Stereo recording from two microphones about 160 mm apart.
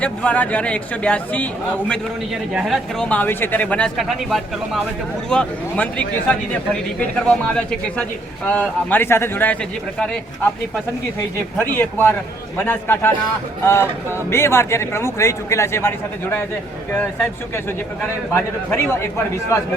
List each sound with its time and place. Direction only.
0.0 s speech: 10° left (ahead or behind)
1.9 s a man's voice: centre (ahead or behind)
11.2 s speech: 15° left (ahead or behind)
18.3 s speech: 15° left (ahead or behind)